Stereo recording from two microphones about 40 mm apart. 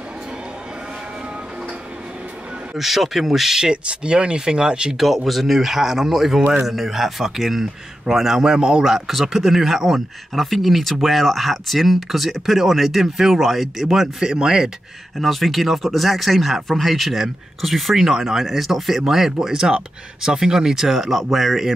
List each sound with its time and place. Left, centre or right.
2.8 s speech: centre
3.7 s speech: right
4.9 s speech: centre; by 8.8 s right
8.8 s speech: centre
14.2 s speech: centre
15.1 s speech: centre
20.9 s speech: centre